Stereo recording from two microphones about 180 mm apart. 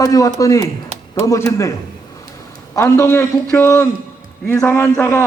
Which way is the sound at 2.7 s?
15° left (ahead or behind).